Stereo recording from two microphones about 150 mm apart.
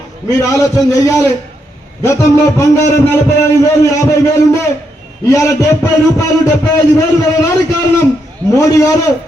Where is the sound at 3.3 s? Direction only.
20° left (ahead or behind).